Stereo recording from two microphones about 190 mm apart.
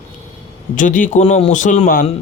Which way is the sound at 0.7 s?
45° left (ahead or behind).